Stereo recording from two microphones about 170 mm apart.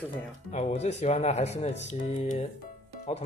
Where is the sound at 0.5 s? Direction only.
40° left (ahead or behind).